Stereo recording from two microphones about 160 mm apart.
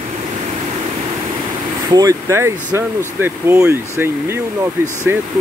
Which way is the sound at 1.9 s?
20° right (ahead or behind).